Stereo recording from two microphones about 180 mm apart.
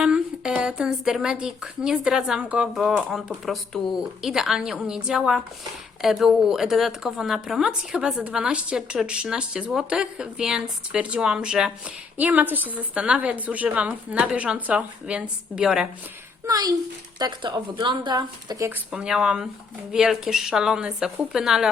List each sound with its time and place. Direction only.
0.0 s a woman's voice: 5° right (ahead or behind)
16.5 s speech: 20° right (ahead or behind)
18.9 s speech: 5° right (ahead or behind)